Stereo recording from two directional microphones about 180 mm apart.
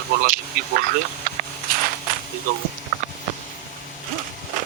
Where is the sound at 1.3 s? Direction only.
50° right (ahead or behind).